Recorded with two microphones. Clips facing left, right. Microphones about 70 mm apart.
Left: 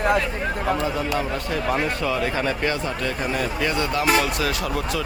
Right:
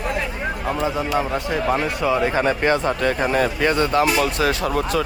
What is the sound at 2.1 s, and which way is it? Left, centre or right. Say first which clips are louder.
Speech: right 4 dB; right.